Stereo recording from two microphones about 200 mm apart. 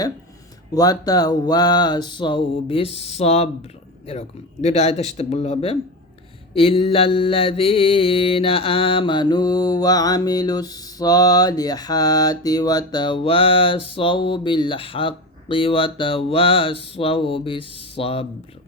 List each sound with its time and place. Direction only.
0.7 s mantra: 20° left (ahead or behind)
4.6 s speech: 35° left (ahead or behind)
6.5 s mantra: 25° left (ahead or behind)